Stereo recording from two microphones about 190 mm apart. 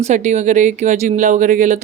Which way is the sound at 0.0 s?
40° right (ahead or behind).